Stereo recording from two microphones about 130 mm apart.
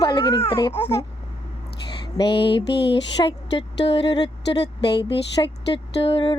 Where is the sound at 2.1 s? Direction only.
40° left (ahead or behind).